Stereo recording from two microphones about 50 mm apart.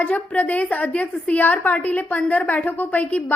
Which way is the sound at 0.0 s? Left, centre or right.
Left.